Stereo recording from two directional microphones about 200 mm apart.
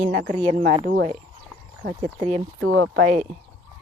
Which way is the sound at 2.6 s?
55° right (ahead or behind).